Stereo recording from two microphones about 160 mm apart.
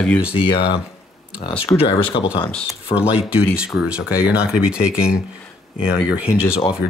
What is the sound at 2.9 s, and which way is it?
Speech, 5° right (ahead or behind).